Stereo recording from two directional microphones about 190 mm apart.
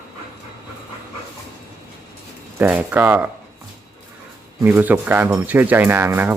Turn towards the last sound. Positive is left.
turn(degrees=-10)  # may be behind; listen again after turning